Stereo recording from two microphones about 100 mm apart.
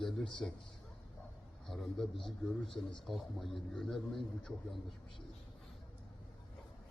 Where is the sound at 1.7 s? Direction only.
Centre (ahead or behind).